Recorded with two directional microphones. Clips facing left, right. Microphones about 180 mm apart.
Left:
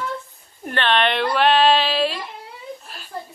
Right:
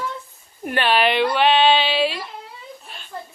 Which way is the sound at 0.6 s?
10° right (ahead or behind).